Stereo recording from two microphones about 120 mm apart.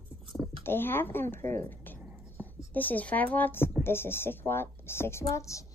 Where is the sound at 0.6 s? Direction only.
20° left (ahead or behind).